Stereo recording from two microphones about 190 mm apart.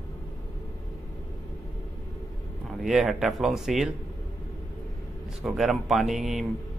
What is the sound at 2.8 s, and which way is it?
A man's voice, centre (ahead or behind).